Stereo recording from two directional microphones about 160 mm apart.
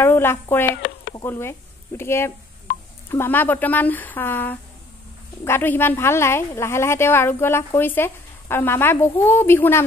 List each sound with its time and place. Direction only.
0.0 s speech: 15° left (ahead or behind)